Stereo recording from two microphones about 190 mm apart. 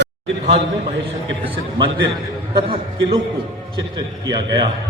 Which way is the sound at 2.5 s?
25° right (ahead or behind).